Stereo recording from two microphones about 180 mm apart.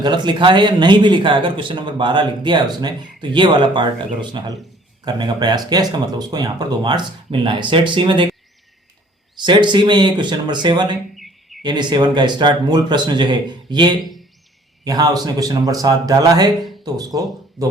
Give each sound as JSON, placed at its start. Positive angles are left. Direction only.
{"t": 0.0, "sound": "speech", "side_deg": -25}
{"t": 9.3, "sound": "speech", "side_deg": -25}